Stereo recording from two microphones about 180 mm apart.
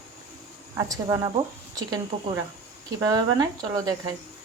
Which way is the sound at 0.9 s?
20° right (ahead or behind).